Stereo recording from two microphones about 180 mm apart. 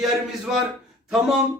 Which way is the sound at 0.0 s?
Centre (ahead or behind).